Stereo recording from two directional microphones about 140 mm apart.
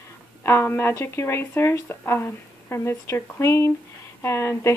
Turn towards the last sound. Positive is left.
turn(degrees=20)  # may be behind; listen again after turning